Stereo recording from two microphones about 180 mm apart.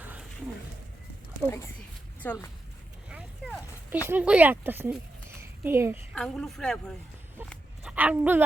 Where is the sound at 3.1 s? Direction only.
10° right (ahead or behind).